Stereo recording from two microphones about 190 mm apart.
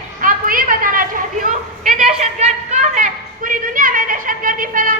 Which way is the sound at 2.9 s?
45° right (ahead or behind).